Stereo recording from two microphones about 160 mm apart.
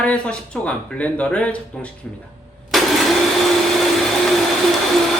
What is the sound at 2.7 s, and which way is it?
Vacuum cleaner, centre (ahead or behind).